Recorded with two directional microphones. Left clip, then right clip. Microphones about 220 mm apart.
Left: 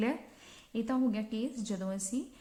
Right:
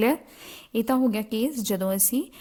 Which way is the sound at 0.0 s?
50° right (ahead or behind).